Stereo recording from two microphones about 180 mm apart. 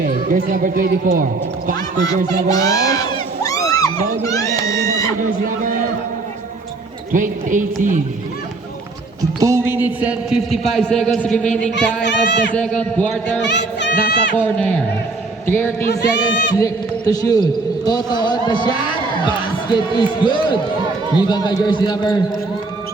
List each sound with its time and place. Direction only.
0.0 s speech: 45° right (ahead or behind)
2.5 s a sound: 20° left (ahead or behind)
7.1 s speech: 45° right (ahead or behind)
9.4 s a man's voice: 15° right (ahead or behind); by 13.4 s 5° left (ahead or behind)
13.4 s speech: 75° left (ahead or behind)
14.3 s a man's voice: 10° left (ahead or behind)
15.9 s speech: 65° left (ahead or behind)
16.6 s a man's voice: 20° left (ahead or behind)
19.7 s a man's voice: 25° left (ahead or behind)